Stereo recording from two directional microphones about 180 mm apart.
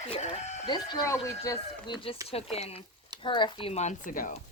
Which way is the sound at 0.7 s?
20° left (ahead or behind).